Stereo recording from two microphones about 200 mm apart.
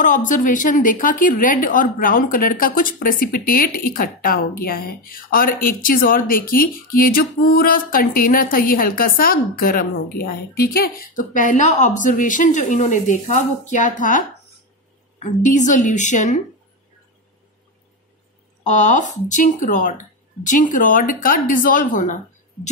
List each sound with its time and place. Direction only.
0.0 s a woman's voice: 40° left (ahead or behind)
18.7 s a woman's voice: 40° left (ahead or behind)